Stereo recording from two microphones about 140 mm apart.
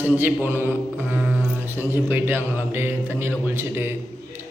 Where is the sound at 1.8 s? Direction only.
15° right (ahead or behind).